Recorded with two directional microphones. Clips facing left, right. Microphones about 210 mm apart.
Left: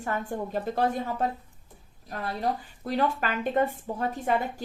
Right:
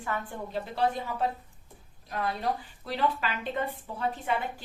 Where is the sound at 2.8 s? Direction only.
45° left (ahead or behind).